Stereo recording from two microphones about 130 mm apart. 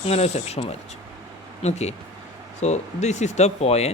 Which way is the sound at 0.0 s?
55° left (ahead or behind).